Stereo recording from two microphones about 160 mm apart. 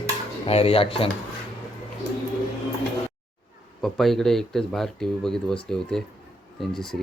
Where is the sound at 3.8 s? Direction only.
Centre (ahead or behind).